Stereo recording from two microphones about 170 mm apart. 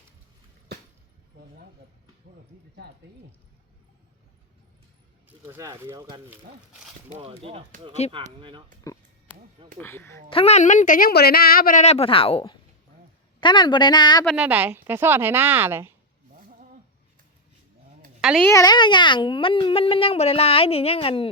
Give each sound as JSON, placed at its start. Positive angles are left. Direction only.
{"t": 5.5, "sound": "a woman's voice", "side_deg": -15}
{"t": 7.2, "sound": "speech", "side_deg": -30}
{"t": 9.7, "sound": "speech", "side_deg": 10}
{"t": 10.2, "sound": "speech", "side_deg": 35}
{"t": 11.8, "sound": "a woman's voice", "side_deg": 40}
{"t": 14.3, "sound": "a woman's voice", "side_deg": -10}
{"t": 18.2, "sound": "a woman's voice", "side_deg": 0}
{"t": 18.4, "sound": "speech", "side_deg": 20}